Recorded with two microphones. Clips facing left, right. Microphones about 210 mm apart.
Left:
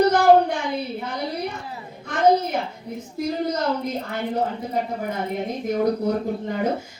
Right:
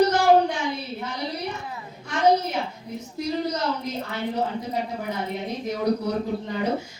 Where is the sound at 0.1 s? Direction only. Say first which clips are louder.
Left 3 dB; 55° left (ahead or behind).